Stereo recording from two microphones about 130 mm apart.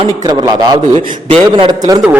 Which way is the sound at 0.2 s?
30° right (ahead or behind).